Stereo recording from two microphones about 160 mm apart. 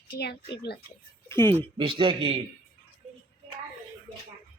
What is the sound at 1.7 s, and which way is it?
Speech, 30° right (ahead or behind).